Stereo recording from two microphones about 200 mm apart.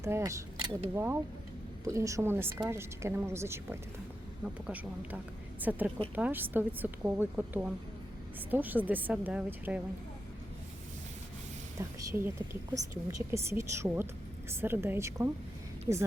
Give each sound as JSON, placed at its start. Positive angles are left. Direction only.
{"t": 0.0, "sound": "speech", "side_deg": -15}
{"t": 0.9, "sound": "a woman's voice", "side_deg": -10}
{"t": 11.8, "sound": "a woman's voice", "side_deg": -15}